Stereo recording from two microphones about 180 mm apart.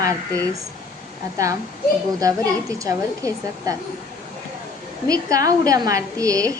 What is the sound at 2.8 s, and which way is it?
Speech, 20° right (ahead or behind).